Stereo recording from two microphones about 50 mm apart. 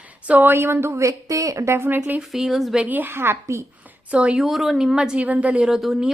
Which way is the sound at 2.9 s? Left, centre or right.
Right.